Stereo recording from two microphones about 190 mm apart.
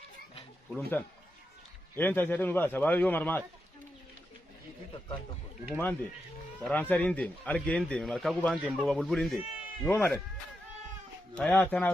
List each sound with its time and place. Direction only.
0.7 s a man's voice: 5° left (ahead or behind)
4.9 s speech: 25° left (ahead or behind)
6.6 s a man's voice: 10° left (ahead or behind)
11.3 s a man's voice: 5° left (ahead or behind)